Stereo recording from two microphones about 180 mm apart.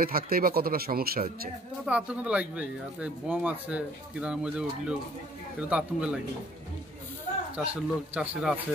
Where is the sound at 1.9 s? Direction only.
5° right (ahead or behind).